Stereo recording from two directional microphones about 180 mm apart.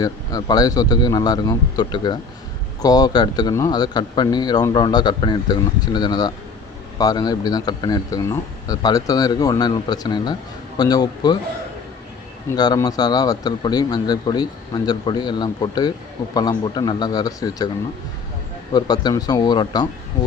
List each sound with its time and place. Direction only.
0.0 s speech: 20° left (ahead or behind)
12.5 s speech: 20° left (ahead or behind)
18.7 s speech: 20° left (ahead or behind)